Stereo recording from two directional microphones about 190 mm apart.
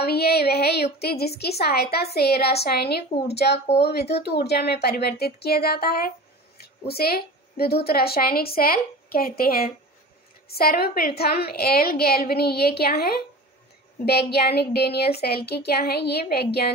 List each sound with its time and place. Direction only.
0.0 s a woman's voice: 55° left (ahead or behind)
5.2 s music: 55° left (ahead or behind)
6.9 s a woman's voice: 55° left (ahead or behind)
9.4 s music: 50° left (ahead or behind)
10.5 s a woman's voice: 55° left (ahead or behind)